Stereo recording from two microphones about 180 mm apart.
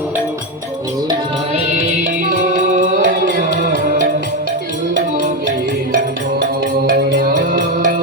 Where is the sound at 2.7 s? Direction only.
40° right (ahead or behind).